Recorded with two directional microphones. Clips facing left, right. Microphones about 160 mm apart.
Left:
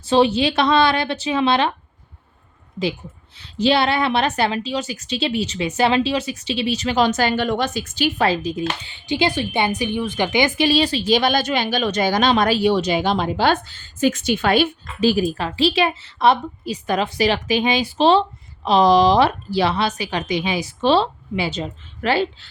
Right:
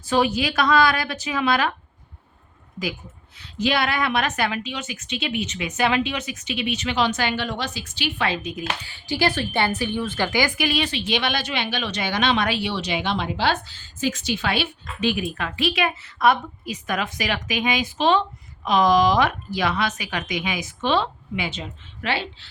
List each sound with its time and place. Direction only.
0.0 s speech: 30° left (ahead or behind)
3.3 s a woman's voice: 30° left (ahead or behind)